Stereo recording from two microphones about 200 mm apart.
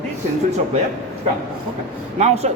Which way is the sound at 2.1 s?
30° right (ahead or behind).